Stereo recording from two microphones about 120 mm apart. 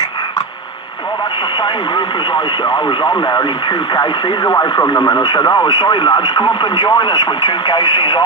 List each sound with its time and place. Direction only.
1.6 s speech: 40° left (ahead or behind)
4.5 s speech: 30° left (ahead or behind)